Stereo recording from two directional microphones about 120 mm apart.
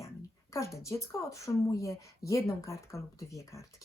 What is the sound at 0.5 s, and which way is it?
Speech, 25° left (ahead or behind).